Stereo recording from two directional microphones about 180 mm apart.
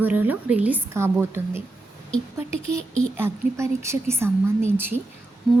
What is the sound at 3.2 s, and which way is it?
A woman's voice, 15° right (ahead or behind).